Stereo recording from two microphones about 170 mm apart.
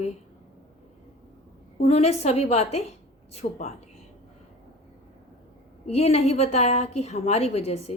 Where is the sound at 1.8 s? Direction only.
40° left (ahead or behind).